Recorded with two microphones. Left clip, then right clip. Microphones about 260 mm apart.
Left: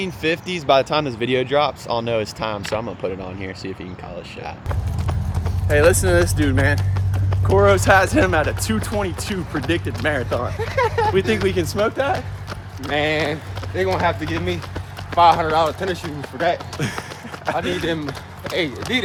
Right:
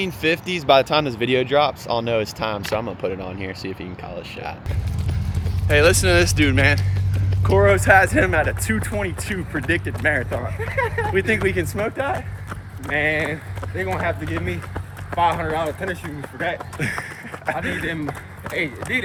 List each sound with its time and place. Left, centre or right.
0.0 s speech: centre
5.6 s speech: centre
10.6 s speech: left
11.1 s speech: centre
12.9 s speech: left
16.7 s a sound: centre
18.8 s speech: centre